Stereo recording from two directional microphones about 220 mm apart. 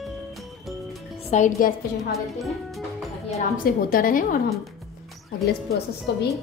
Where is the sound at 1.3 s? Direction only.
35° left (ahead or behind).